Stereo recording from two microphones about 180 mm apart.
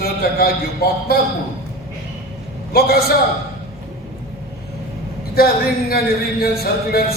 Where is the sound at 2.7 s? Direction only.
60° left (ahead or behind).